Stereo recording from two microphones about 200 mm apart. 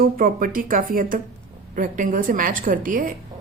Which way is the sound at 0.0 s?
45° right (ahead or behind).